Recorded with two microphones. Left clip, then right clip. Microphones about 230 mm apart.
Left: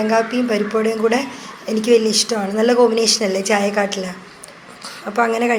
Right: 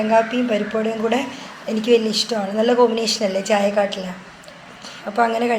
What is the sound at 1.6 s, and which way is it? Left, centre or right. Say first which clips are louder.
Speech: left 3 dB; left.